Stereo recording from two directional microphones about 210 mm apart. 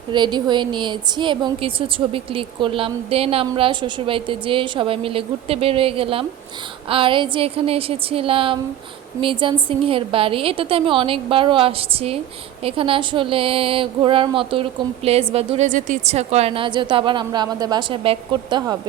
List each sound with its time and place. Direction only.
0.1 s speech: 20° right (ahead or behind)